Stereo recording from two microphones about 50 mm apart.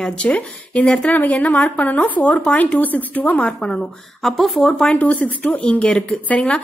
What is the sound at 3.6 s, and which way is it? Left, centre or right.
Speech, centre.